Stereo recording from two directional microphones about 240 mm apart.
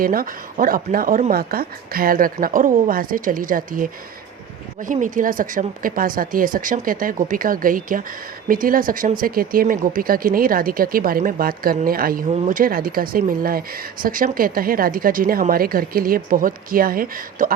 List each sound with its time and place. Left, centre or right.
0.0 s speech: right
4.9 s speech: right